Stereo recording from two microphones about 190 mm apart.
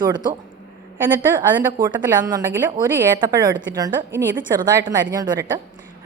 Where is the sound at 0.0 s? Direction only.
20° right (ahead or behind).